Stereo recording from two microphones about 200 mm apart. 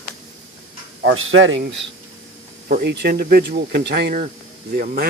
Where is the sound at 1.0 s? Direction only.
85° right; by 1.6 s 70° right (ahead or behind).